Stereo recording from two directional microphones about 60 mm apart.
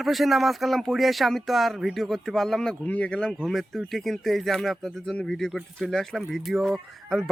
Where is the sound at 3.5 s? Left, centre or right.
Centre.